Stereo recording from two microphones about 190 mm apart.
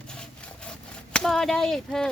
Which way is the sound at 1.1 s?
Centre (ahead or behind).